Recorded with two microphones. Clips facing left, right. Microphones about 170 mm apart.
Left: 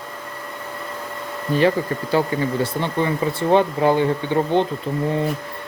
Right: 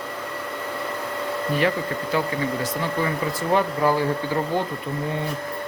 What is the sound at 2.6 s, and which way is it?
Speech, 25° left (ahead or behind).